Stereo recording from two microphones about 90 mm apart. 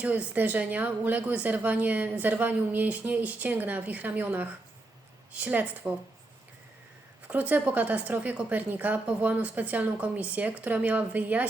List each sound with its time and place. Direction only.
0.0 s a woman's voice: 20° right (ahead or behind)
7.3 s a woman's voice: 15° right (ahead or behind)